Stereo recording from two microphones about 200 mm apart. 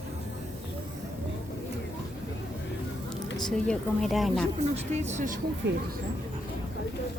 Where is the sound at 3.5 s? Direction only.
5° left (ahead or behind).